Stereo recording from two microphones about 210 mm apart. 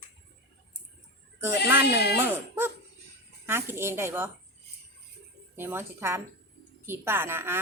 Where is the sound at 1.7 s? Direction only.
10° right (ahead or behind).